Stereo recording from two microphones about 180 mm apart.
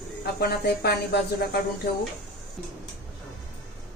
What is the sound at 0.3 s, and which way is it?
A woman's voice, 60° left (ahead or behind).